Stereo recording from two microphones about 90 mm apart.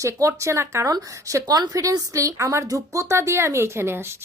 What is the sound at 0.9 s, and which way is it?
A woman's voice, 40° right (ahead or behind).